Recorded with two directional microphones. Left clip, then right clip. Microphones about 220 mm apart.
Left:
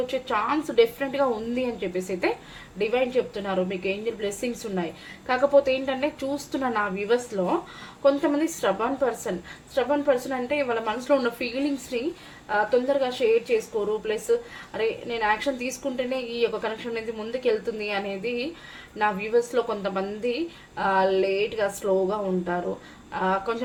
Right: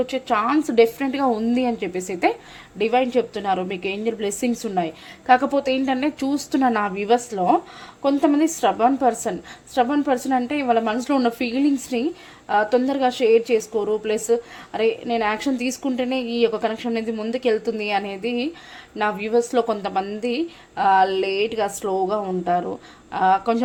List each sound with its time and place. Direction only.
0.1 s a woman's voice: 40° right (ahead or behind)
12.5 s a woman's voice: 45° right (ahead or behind)